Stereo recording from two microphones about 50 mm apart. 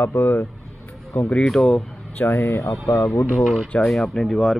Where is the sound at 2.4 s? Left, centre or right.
Left.